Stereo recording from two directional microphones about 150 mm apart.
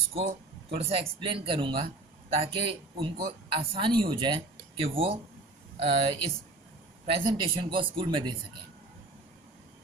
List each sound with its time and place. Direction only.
0.1 s speech: 40° right (ahead or behind)